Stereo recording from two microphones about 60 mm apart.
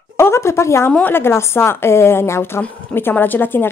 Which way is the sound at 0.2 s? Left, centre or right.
Left.